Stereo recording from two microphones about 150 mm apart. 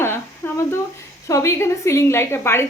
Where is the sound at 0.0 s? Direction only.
15° left (ahead or behind).